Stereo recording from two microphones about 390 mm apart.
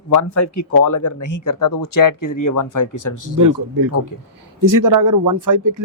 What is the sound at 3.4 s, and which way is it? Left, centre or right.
Speech, right.